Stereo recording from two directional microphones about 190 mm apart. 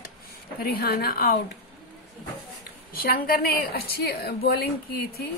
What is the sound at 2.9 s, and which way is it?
A woman's voice, 50° left (ahead or behind).